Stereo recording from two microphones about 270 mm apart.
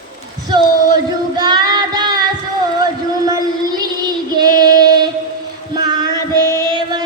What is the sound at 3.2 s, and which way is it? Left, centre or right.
Child singing, centre.